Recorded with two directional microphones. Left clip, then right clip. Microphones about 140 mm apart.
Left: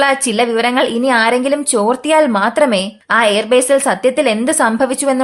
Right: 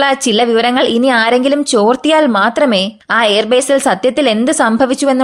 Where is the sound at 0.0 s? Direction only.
40° right (ahead or behind).